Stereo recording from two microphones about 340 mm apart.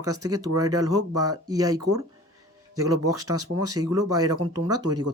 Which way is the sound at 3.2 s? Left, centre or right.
Right.